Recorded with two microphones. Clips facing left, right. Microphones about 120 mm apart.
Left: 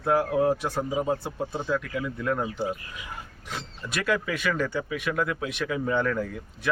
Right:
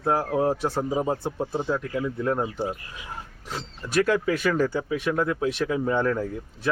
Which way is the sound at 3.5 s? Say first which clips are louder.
Right 8 dB; 35° right (ahead or behind).